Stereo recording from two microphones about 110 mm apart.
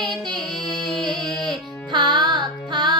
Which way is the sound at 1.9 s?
45° right (ahead or behind).